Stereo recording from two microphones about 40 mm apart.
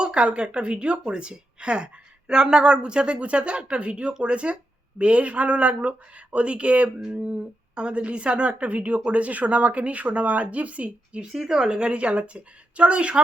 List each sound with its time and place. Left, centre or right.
0.0 s a woman's voice: right
11.4 s a woman's voice: centre